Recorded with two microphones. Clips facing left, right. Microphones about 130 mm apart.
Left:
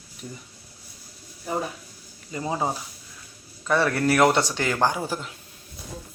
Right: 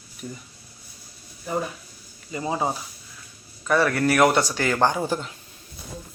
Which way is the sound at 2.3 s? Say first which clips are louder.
Right 1 dB; 10° right (ahead or behind).